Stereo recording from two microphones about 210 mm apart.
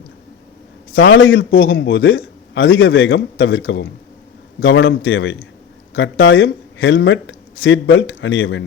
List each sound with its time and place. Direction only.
0.9 s a man's voice: 65° left (ahead or behind)